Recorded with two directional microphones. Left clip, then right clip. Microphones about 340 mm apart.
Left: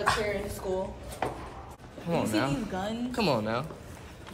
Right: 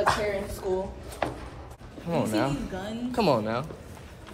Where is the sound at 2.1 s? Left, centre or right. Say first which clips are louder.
Right 2 dB; centre.